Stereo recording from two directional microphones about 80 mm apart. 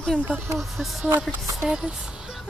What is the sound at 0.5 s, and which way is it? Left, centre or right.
Speech, centre.